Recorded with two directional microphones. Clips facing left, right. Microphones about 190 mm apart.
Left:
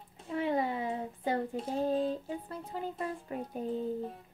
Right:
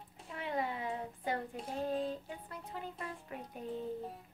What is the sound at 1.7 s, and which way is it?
Speech, 35° left (ahead or behind).